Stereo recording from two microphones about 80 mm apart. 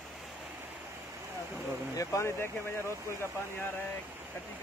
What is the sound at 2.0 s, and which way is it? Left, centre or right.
Speech, left.